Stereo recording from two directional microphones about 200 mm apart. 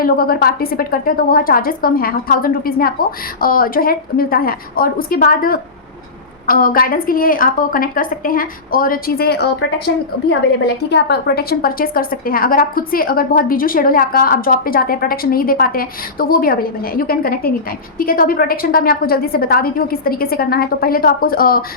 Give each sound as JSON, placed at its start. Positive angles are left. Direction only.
{"t": 0.0, "sound": "a woman's voice", "side_deg": 50}
{"t": 10.8, "sound": "a woman's voice", "side_deg": 55}